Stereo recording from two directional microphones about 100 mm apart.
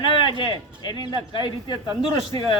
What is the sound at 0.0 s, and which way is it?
Speech, 55° left (ahead or behind).